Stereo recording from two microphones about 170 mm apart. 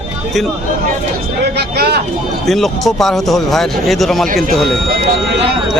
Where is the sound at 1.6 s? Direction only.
70° right (ahead or behind).